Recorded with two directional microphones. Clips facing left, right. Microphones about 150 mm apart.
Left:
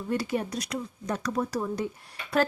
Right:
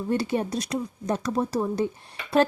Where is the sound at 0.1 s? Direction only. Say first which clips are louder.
Right 3 dB; 30° right (ahead or behind).